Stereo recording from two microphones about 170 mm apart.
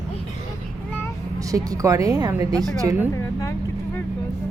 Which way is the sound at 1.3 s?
20° right (ahead or behind).